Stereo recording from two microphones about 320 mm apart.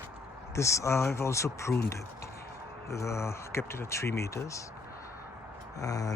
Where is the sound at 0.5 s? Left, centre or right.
Centre.